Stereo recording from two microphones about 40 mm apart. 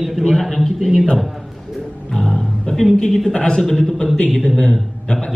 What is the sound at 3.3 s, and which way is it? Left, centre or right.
Speech, left.